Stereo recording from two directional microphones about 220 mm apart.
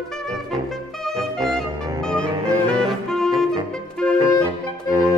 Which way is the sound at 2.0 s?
5° left (ahead or behind).